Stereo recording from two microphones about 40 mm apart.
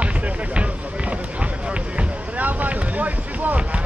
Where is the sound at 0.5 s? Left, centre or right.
Right.